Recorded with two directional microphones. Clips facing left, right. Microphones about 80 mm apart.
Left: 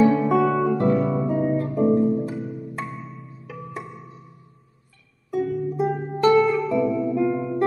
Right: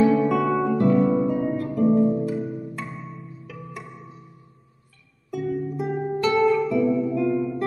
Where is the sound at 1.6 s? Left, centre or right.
Left.